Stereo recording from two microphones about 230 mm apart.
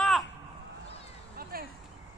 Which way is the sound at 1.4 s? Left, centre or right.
Right.